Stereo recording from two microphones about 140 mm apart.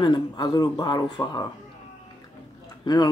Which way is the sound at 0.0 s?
30° left (ahead or behind).